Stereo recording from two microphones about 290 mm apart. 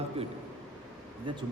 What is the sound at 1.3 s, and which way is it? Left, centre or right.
Speech, centre.